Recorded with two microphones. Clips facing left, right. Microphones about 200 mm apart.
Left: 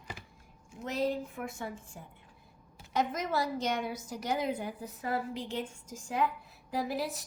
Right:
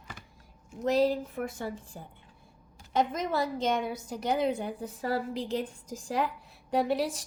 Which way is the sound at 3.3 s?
25° right (ahead or behind).